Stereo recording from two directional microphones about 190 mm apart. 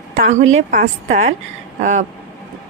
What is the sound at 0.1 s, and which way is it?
A woman's voice, 40° right (ahead or behind).